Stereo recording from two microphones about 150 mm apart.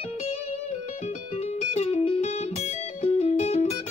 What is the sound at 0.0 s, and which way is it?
Music, 45° left (ahead or behind).